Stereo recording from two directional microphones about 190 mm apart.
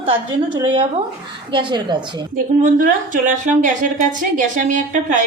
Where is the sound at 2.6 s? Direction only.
45° right (ahead or behind).